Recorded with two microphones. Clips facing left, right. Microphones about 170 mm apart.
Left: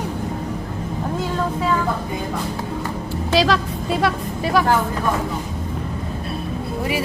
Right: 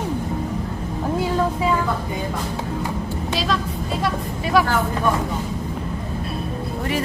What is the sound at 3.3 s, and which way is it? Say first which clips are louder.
Vehicle: left 7 dB; 90° left.